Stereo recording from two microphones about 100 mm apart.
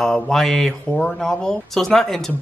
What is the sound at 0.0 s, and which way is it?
Speech, 5° left (ahead or behind).